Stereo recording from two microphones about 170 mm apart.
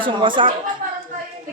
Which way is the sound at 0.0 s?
30° right (ahead or behind).